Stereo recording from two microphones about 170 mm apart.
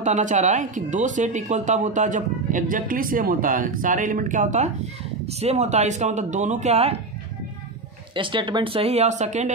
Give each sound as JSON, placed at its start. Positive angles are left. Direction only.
{"t": 0.0, "sound": "speech", "side_deg": -45}
{"t": 8.1, "sound": "speech", "side_deg": -30}